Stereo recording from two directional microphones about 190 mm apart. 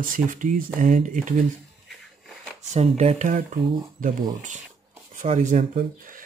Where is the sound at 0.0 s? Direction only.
45° right (ahead or behind).